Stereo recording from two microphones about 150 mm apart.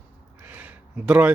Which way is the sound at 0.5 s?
10° right (ahead or behind).